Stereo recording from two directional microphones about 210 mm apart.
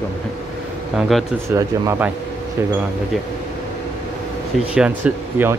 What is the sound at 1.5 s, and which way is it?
Speech, 15° right (ahead or behind).